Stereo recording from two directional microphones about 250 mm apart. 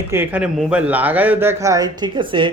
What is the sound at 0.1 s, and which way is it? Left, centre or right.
A man's voice, centre.